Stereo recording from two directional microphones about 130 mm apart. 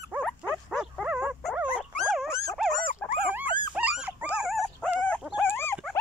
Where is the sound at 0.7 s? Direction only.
Centre (ahead or behind).